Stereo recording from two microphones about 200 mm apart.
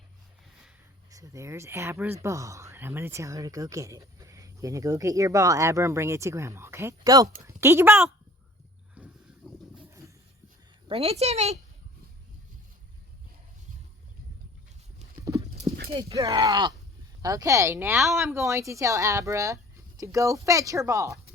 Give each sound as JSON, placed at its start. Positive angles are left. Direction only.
{"t": 1.1, "sound": "speech", "side_deg": -15}
{"t": 9.0, "sound": "a sound", "side_deg": -5}
{"t": 10.8, "sound": "a woman's voice", "side_deg": -30}
{"t": 16.1, "sound": "speech", "side_deg": -15}